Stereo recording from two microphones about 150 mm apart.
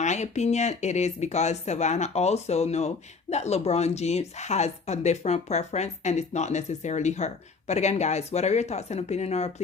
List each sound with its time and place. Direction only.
0.0 s speech: 50° left (ahead or behind)